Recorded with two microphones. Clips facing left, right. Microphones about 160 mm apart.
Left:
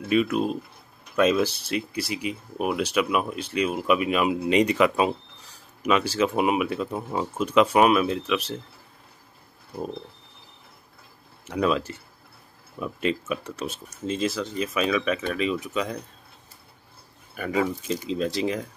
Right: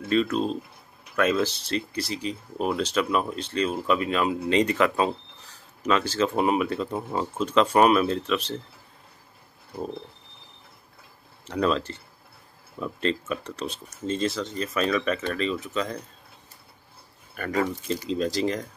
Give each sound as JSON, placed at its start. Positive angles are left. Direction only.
{"t": 0.1, "sound": "speech", "side_deg": 10}
{"t": 11.4, "sound": "speech", "side_deg": 5}
{"t": 17.4, "sound": "speech", "side_deg": 5}